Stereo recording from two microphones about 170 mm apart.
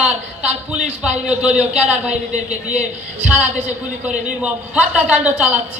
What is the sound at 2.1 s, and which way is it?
Speech, 40° right (ahead or behind).